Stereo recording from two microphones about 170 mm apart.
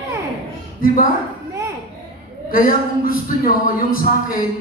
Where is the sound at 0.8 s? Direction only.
55° left (ahead or behind).